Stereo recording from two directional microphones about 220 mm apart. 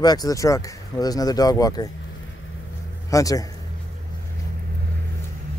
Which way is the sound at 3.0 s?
15° left (ahead or behind).